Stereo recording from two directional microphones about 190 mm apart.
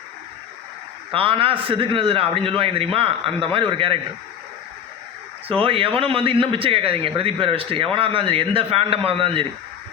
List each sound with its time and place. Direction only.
1.1 s a man's voice: 30° right (ahead or behind)
5.5 s a man's voice: 30° right (ahead or behind)